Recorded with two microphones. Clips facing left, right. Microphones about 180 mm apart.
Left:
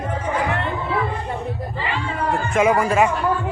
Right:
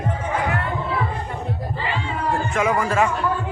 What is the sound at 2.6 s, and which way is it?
Speech, 20° left (ahead or behind).